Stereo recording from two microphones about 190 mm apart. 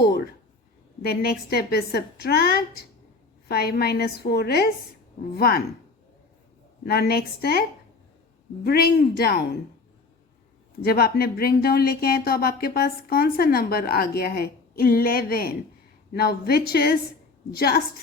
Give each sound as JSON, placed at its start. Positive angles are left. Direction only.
{"t": 1.0, "sound": "a woman's voice", "side_deg": 55}
{"t": 6.8, "sound": "a woman's voice", "side_deg": 55}
{"t": 8.6, "sound": "a woman's voice", "side_deg": 55}
{"t": 10.8, "sound": "a woman's voice", "side_deg": 55}